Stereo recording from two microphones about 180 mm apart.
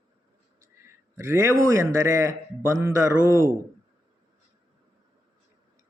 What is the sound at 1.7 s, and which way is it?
Speech, 15° right (ahead or behind).